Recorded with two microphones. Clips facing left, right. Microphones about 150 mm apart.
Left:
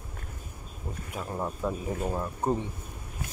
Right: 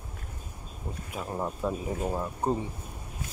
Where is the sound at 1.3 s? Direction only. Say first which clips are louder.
Right 1 dB; 5° right (ahead or behind).